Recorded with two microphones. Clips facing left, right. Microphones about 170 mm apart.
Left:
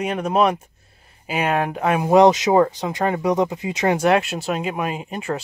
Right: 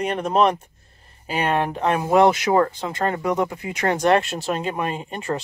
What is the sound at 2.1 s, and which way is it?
Speech, 20° left (ahead or behind).